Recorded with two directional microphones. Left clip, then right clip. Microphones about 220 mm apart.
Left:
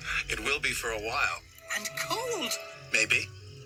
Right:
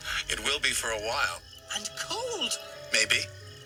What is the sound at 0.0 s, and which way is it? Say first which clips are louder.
Speech: right 1 dB; 35° right (ahead or behind).